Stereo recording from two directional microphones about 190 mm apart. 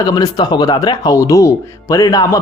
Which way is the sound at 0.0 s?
20° left (ahead or behind).